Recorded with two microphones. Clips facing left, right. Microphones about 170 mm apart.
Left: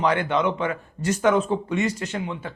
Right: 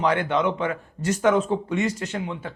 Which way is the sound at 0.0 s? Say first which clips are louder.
Even; 45° right (ahead or behind).